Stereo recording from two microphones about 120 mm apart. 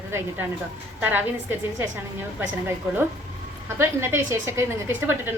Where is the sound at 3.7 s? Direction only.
20° right (ahead or behind).